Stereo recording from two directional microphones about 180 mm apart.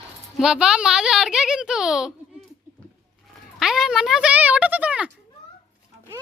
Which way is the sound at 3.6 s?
Centre (ahead or behind).